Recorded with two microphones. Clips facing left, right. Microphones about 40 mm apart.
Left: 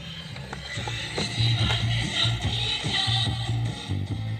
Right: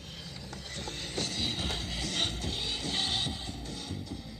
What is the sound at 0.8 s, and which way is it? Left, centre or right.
Music, left.